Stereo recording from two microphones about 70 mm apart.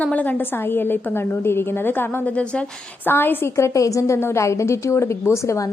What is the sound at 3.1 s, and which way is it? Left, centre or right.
Speech, left.